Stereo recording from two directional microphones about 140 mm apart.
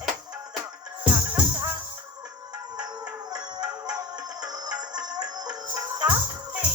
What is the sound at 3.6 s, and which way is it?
Music, 5° right (ahead or behind).